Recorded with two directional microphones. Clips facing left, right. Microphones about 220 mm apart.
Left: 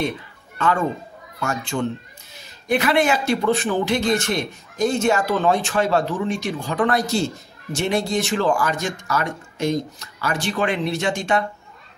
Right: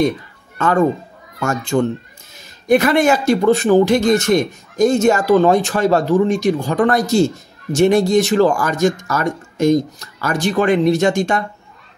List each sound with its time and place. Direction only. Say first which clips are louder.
0.6 s speech: right 6 dB; 45° right (ahead or behind)